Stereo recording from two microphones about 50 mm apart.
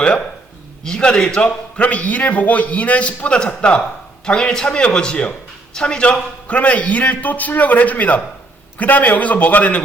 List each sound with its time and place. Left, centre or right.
0.9 s a man's voice: centre
1.7 s a man's voice: left